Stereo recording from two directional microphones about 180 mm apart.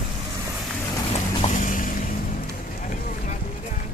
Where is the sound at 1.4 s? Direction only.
45° left (ahead or behind).